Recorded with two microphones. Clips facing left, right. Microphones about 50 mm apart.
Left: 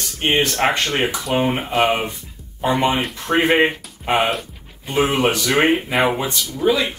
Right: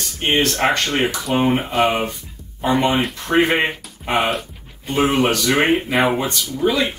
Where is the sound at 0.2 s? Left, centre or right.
Centre.